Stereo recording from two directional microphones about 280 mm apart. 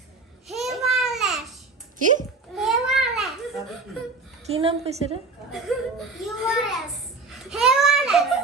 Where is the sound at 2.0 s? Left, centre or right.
Right.